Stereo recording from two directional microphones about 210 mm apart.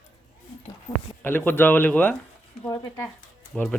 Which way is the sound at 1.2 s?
10° left (ahead or behind).